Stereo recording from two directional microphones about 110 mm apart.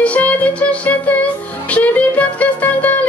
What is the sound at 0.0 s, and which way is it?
Music, 15° left (ahead or behind).